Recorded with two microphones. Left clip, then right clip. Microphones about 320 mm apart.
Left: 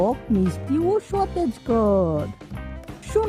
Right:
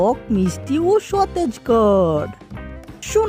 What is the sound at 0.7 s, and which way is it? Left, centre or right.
Speech, centre.